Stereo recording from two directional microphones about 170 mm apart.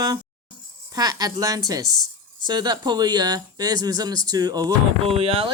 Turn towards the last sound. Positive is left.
turn(degrees=-35)  # may be behind; listen again after turning